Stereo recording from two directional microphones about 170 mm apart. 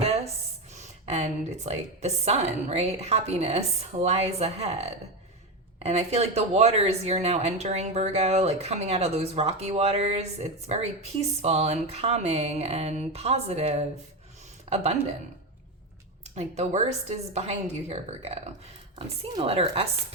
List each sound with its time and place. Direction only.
0.7 s speech: 40° right (ahead or behind)
16.3 s speech: 40° right (ahead or behind)